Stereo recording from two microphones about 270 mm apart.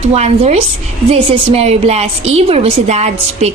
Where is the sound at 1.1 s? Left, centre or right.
Right.